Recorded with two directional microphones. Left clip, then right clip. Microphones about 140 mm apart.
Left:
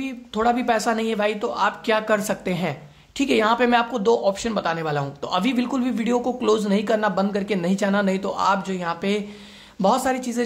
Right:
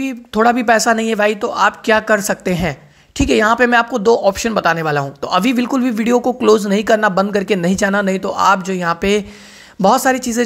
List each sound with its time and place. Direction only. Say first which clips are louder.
0.0 s speech: right 8 dB; 45° right (ahead or behind)